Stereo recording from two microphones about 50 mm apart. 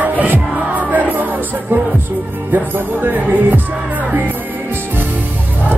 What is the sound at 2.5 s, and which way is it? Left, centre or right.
Speech, right.